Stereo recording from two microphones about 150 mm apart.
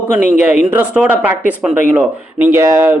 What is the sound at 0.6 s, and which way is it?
Speech, 10° right (ahead or behind).